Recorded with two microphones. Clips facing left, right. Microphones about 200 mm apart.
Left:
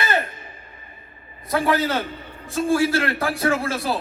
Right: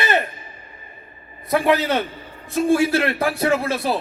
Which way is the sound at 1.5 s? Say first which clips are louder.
Right 3 dB; 20° right (ahead or behind).